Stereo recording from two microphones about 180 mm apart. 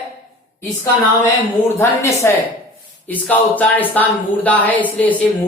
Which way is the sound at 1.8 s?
15° left (ahead or behind).